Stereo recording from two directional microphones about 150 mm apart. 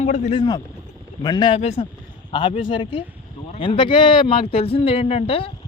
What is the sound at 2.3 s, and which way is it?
Speech, 35° left (ahead or behind).